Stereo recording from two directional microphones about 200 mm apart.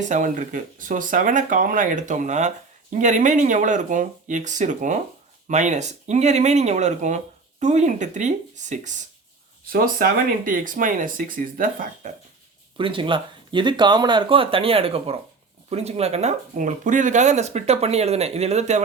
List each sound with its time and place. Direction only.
0.0 s speech: 40° right (ahead or behind)
12.7 s speech: 25° right (ahead or behind)